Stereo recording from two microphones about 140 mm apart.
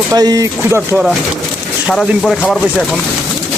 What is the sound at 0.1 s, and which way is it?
Speech, 25° right (ahead or behind).